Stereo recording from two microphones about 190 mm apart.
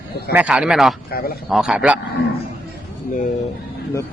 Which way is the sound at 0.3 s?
5° right (ahead or behind).